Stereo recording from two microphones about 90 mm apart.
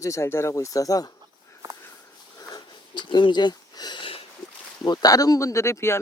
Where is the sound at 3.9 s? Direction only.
90° left.